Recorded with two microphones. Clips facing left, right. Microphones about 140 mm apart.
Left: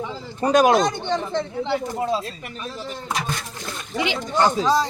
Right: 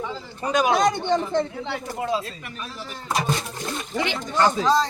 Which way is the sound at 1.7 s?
30° left (ahead or behind).